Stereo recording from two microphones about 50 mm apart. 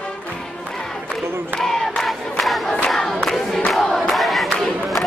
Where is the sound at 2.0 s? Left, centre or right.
Centre.